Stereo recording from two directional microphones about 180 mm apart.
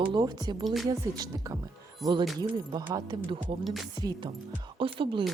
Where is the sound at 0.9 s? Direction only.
20° right (ahead or behind).